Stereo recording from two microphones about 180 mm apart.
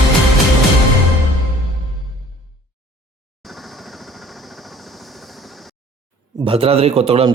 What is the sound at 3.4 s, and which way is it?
Vehicle, centre (ahead or behind).